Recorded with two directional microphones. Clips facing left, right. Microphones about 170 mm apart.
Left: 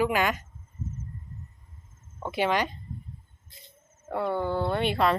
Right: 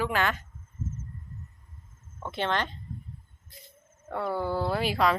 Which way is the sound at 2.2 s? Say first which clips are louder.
Left 3 dB; 10° left (ahead or behind).